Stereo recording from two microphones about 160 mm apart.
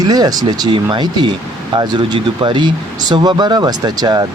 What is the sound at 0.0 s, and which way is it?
Speech, 25° right (ahead or behind).